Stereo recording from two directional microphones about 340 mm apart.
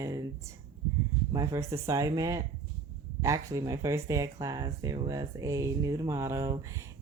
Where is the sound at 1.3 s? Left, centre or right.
Centre.